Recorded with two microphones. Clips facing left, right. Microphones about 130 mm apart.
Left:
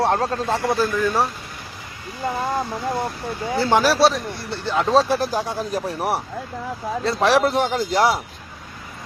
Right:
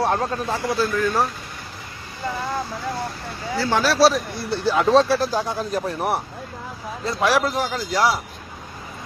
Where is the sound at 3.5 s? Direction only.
20° left (ahead or behind).